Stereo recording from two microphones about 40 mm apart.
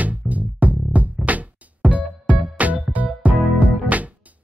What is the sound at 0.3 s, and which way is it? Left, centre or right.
Music, right.